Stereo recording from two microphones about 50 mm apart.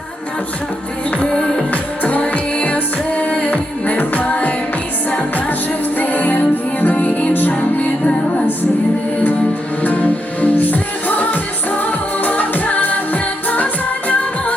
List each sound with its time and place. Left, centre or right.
1.3 s music: centre
1.7 s music: left
6.0 s music: left
9.8 s music: left